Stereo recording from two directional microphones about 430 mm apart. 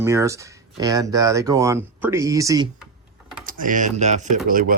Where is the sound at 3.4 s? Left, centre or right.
Centre.